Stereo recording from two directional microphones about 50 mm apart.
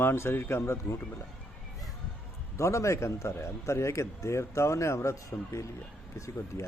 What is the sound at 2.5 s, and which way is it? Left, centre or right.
A man's voice, left.